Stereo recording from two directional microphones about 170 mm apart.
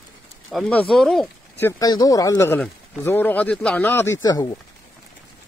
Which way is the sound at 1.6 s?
15° left (ahead or behind).